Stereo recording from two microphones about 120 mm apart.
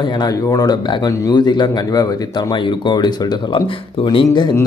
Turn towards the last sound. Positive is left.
turn(degrees=45)  # may be behind; listen again after turning